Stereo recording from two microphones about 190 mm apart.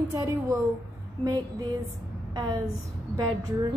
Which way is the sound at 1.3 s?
20° right (ahead or behind).